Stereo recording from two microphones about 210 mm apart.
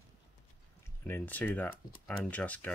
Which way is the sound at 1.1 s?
10° left (ahead or behind).